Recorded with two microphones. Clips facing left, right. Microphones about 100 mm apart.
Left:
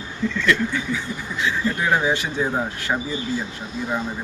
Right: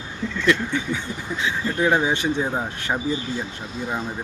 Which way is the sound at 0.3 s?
25° right (ahead or behind).